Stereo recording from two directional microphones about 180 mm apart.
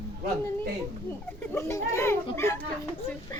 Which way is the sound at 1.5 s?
15° left (ahead or behind).